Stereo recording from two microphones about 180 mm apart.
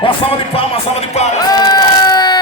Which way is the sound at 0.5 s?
30° left (ahead or behind).